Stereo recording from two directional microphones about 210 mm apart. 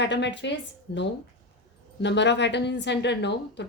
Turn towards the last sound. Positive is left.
turn(degrees=55)  # may be behind; listen again after turning